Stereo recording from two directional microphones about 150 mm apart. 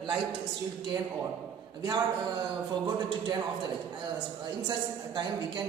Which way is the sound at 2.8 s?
30° right (ahead or behind).